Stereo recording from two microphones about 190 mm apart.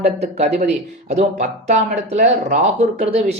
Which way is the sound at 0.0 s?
35° right (ahead or behind).